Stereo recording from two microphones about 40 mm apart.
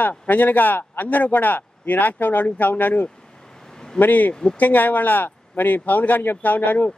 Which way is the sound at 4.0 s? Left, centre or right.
Left.